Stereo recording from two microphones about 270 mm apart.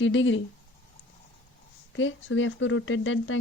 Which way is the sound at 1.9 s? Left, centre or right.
Left.